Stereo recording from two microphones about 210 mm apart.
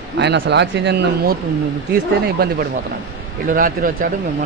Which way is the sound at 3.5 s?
40° right (ahead or behind).